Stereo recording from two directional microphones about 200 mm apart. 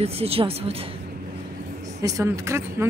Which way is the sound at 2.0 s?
15° right (ahead or behind).